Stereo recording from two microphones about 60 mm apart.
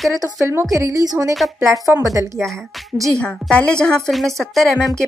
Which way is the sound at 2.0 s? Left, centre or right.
Right.